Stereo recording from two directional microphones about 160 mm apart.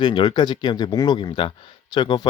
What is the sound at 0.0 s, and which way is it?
Speech, 30° left (ahead or behind).